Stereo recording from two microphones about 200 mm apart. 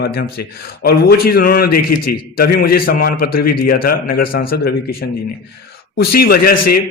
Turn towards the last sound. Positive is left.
turn(degrees=50)  # may be behind; listen again after turning